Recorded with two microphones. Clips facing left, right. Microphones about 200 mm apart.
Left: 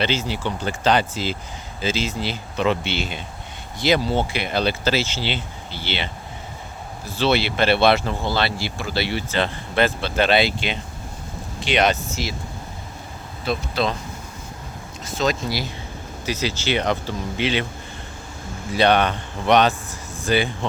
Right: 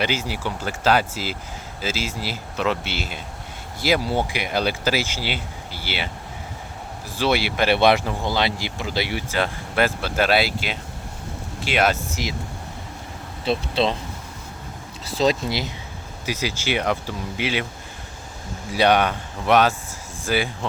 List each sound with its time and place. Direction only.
0.0 s speech: 10° right (ahead or behind)
7.2 s speech: 10° right (ahead or behind)
12.2 s speech: 15° right (ahead or behind)
13.4 s speech: 30° right (ahead or behind)
15.1 s speech: 30° right (ahead or behind); by 17.7 s 5° right (ahead or behind)
18.7 s speech: 10° right (ahead or behind)